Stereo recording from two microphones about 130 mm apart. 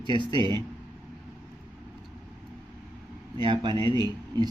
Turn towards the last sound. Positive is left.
turn(degrees=-35)  # may be behind; listen again after turning